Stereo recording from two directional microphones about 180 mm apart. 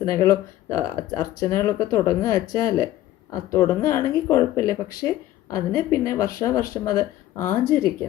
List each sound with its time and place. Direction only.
0.0 s speech: 15° left (ahead or behind)